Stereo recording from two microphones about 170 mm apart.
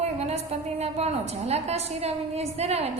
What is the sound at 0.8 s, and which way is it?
A woman's voice, 40° right (ahead or behind).